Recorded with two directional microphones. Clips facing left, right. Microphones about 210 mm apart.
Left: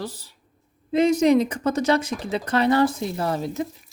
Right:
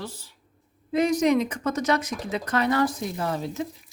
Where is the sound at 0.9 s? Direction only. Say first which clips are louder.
Left 4 dB; 25° left (ahead or behind).